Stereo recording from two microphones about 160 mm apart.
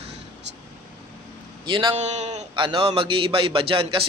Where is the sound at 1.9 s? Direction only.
45° right (ahead or behind).